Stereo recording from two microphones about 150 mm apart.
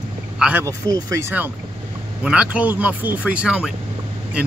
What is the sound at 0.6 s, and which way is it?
Speech, 20° right (ahead or behind).